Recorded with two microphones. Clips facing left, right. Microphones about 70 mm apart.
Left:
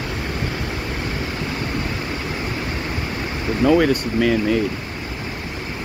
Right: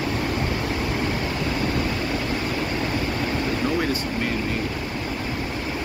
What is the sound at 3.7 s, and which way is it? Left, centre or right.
Speech, left.